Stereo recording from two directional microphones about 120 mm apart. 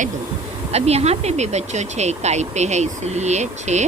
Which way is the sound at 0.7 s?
60° right (ahead or behind).